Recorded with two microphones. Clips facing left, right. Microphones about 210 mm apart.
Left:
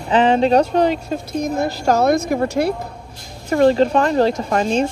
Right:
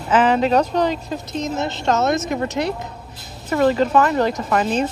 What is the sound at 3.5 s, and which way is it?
Speech, 40° left (ahead or behind).